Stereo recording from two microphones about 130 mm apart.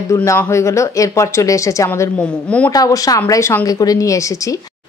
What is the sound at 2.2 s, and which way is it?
Speech, 10° left (ahead or behind).